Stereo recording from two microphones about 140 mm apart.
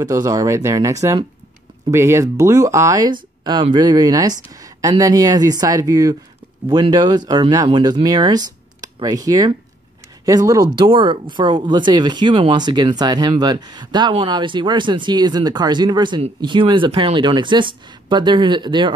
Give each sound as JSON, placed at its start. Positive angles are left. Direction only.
{"t": 0.0, "sound": "speech", "side_deg": -25}
{"t": 10.9, "sound": "speech", "side_deg": -35}